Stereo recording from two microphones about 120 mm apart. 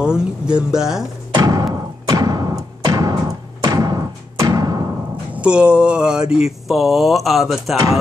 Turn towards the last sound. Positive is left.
turn(degrees=0)  # may be behind; listen again after turning